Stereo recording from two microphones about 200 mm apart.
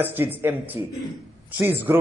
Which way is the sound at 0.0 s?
10° right (ahead or behind).